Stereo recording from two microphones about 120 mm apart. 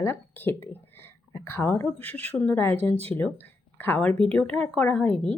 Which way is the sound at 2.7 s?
60° right (ahead or behind).